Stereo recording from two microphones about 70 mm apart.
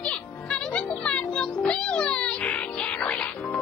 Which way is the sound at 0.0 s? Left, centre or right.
Centre.